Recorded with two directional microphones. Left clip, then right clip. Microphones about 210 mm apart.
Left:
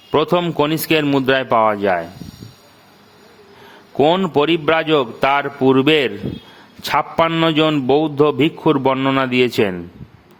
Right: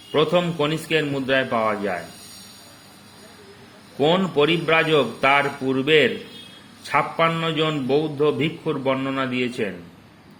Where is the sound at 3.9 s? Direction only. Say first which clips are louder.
Left 5 dB; 55° left (ahead or behind).